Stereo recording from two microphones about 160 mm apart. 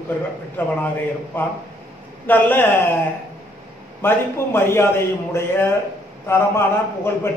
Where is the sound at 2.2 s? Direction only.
10° left (ahead or behind).